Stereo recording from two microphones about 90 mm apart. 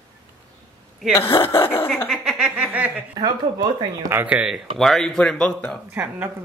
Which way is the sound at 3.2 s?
60° right (ahead or behind).